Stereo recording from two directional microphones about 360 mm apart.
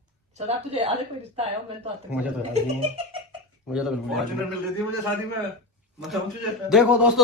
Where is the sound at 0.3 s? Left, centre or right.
Centre.